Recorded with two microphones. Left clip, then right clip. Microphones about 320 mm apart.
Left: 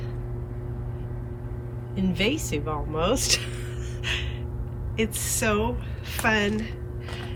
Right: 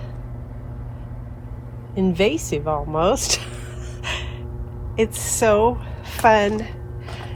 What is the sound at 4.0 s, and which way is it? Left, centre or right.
Gasp, centre.